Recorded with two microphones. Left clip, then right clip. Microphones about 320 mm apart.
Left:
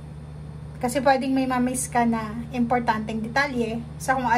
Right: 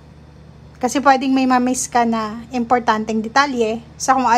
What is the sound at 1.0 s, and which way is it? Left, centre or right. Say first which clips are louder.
A woman's voice: right 7 dB; centre.